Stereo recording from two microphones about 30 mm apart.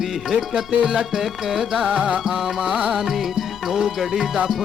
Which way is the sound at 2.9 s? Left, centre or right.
Centre.